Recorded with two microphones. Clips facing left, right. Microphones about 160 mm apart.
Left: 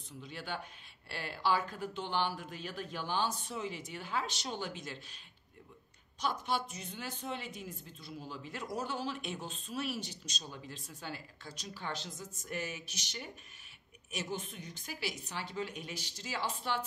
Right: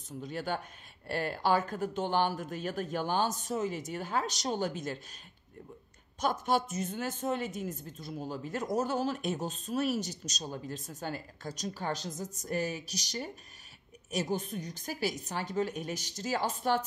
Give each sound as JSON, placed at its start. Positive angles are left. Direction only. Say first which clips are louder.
{"t": 0.2, "sound": "speech", "louder": "right 7 dB", "side_deg": -45}
{"t": 6.1, "sound": "speech", "louder": "right 6 dB", "side_deg": -45}